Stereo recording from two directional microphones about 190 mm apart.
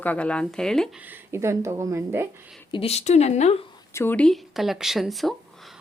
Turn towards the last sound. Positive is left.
turn(degrees=0)  # may be behind; listen again after turning